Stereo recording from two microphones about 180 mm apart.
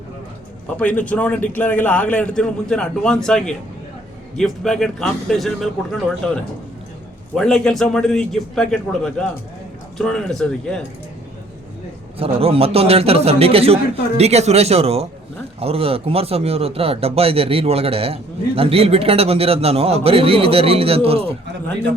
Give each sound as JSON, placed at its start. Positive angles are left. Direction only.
{"t": 0.8, "sound": "a man's voice", "side_deg": 10}
{"t": 7.3, "sound": "speech", "side_deg": 5}
{"t": 12.2, "sound": "speech", "side_deg": -30}